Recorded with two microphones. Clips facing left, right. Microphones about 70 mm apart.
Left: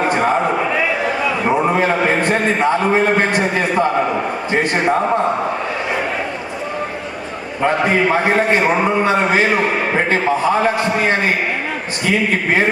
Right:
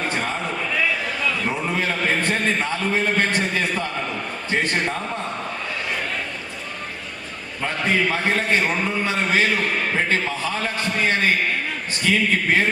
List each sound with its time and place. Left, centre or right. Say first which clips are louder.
0.0 s a sound: left 10 dB; left
4.9 s a man's voice: left 12 dB; left
7.6 s a man's voice: left 7 dB; left